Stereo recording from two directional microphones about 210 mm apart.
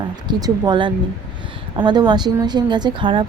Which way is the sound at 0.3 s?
20° right (ahead or behind).